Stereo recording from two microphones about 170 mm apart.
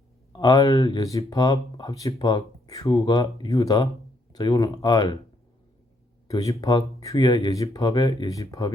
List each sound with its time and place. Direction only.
0.3 s speech: 25° left (ahead or behind)
6.2 s speech: 20° left (ahead or behind)